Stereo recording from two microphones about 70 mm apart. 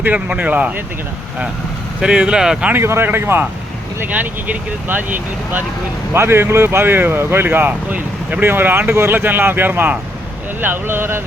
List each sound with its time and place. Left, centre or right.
0.0 s speech: right
2.0 s speech: centre
2.8 s speech: right